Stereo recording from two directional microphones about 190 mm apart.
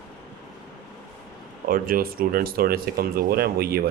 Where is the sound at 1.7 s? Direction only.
50° right (ahead or behind).